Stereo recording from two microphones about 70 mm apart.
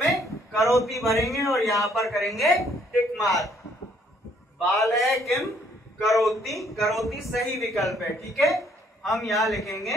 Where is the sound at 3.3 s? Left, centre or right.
Left.